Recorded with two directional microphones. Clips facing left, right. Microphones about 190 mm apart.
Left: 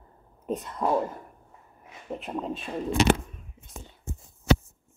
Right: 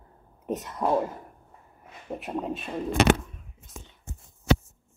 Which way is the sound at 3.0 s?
55° right (ahead or behind).